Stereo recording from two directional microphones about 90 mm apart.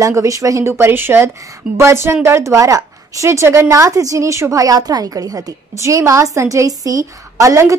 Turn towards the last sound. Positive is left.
turn(degrees=-35)  # may be behind; listen again after turning